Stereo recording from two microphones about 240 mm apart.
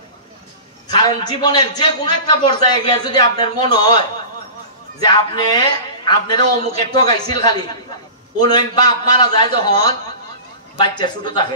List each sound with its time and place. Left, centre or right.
0.8 s a sound: centre
1.4 s a man's voice: centre
5.0 s a man's voice: centre